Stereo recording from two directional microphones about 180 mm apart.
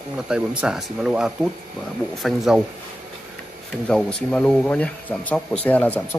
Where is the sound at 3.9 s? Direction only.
5° left (ahead or behind).